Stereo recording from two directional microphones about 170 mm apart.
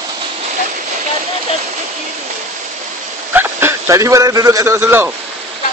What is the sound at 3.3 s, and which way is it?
Speech, 15° right (ahead or behind).